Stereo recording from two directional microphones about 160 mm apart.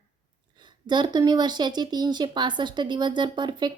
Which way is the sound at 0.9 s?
30° right (ahead or behind).